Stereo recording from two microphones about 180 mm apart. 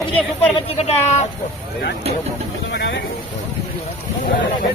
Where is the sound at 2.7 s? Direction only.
75° left (ahead or behind).